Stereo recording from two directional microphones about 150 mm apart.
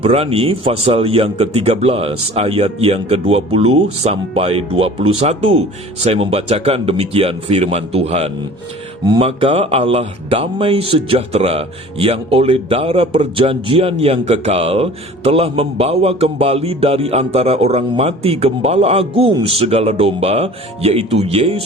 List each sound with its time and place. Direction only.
0.0 s speech: 40° right (ahead or behind)